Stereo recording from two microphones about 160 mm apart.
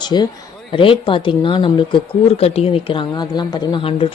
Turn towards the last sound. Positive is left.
turn(degrees=35)  # may be behind; listen again after turning